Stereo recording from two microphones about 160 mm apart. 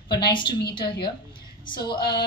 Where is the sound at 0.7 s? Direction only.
30° left (ahead or behind).